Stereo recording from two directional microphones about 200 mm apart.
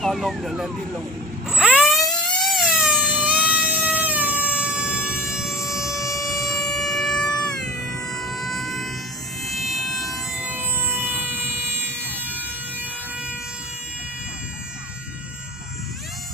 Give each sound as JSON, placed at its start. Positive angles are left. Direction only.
{"t": 0.0, "sound": "speech", "side_deg": 0}
{"t": 1.5, "sound": "a sound", "side_deg": -5}
{"t": 6.1, "sound": "civil defense siren", "side_deg": 15}
{"t": 6.4, "sound": "siren", "side_deg": 0}
{"t": 8.0, "sound": "vehicle", "side_deg": 0}